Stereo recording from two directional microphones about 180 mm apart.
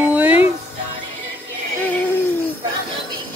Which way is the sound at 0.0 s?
10° right (ahead or behind).